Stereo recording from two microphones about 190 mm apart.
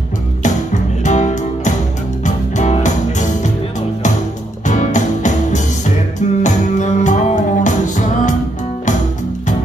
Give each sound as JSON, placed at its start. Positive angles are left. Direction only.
{"t": 0.4, "sound": "music", "side_deg": 40}
{"t": 4.6, "sound": "music", "side_deg": 40}